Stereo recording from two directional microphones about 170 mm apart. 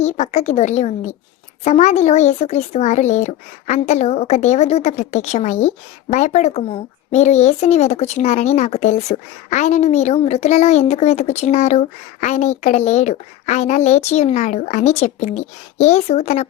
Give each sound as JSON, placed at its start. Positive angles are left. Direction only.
{"t": 0.0, "sound": "a child's voice", "side_deg": 40}